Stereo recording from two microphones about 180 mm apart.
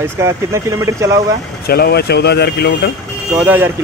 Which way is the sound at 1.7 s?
60° left (ahead or behind).